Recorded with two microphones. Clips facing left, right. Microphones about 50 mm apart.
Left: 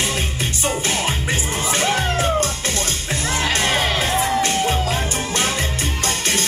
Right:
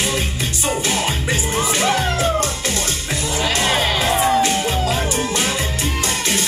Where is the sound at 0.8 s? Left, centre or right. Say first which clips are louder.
Right 1 dB; left.